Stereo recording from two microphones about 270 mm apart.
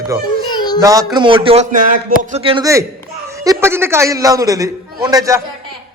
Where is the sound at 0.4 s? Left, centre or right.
Centre.